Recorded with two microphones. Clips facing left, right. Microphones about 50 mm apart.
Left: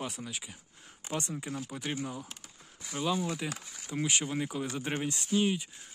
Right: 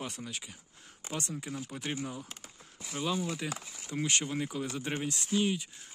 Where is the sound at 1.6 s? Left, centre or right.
Centre.